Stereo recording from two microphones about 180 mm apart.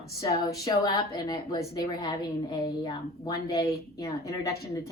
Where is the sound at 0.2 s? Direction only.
20° left (ahead or behind).